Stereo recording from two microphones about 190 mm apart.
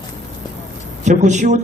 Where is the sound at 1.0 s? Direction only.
40° right (ahead or behind).